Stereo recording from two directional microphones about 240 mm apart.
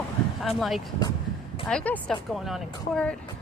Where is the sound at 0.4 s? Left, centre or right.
Centre.